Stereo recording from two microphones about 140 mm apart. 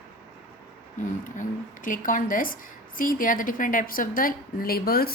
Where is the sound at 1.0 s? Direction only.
70° left (ahead or behind).